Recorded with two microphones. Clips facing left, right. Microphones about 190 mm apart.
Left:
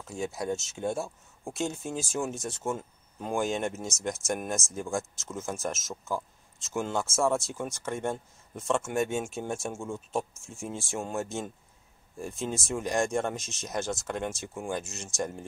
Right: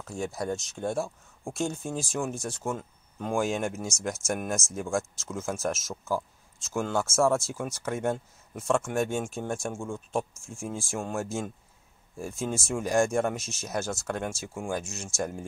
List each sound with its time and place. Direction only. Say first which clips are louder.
0.0 s speech: right 1 dB; centre (ahead or behind)